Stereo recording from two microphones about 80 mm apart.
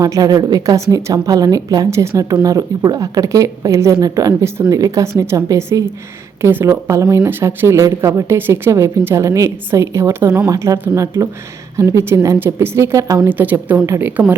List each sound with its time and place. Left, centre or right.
0.0 s a woman's voice: right
7.3 s a woman's voice: right
8.4 s a woman's voice: right
8.7 s a woman's voice: right
13.2 s a woman's voice: right